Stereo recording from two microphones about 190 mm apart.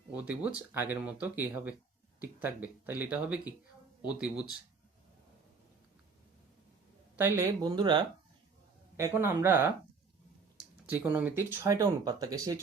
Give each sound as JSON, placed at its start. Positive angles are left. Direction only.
{"t": 0.2, "sound": "speech", "side_deg": -5}
{"t": 7.2, "sound": "speech", "side_deg": -10}